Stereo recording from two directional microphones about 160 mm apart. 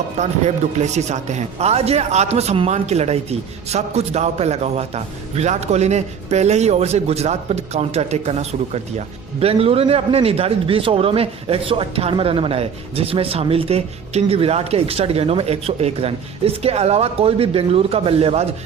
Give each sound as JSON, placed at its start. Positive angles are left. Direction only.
{"t": 0.2, "sound": "a man's voice", "side_deg": -45}